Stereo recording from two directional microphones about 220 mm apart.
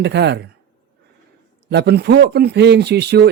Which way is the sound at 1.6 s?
50° right (ahead or behind).